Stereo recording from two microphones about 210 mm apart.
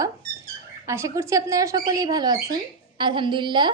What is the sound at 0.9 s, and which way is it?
A woman's voice, 15° right (ahead or behind).